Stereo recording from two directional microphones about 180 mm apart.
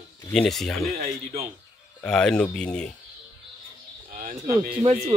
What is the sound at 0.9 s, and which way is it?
Speech, 35° right (ahead or behind).